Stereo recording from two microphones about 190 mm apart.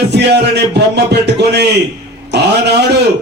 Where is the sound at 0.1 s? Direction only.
60° right (ahead or behind).